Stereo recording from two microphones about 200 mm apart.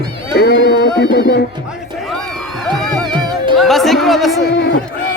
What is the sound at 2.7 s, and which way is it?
Music, centre (ahead or behind).